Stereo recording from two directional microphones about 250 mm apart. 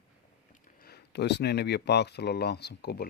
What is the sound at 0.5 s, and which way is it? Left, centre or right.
Speech, left.